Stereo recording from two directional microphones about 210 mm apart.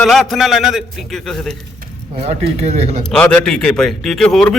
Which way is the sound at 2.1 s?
30° right (ahead or behind).